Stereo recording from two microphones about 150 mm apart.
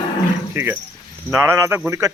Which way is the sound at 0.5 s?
15° right (ahead or behind).